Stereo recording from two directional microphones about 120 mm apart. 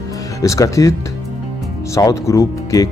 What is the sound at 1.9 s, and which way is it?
Speech, 25° left (ahead or behind).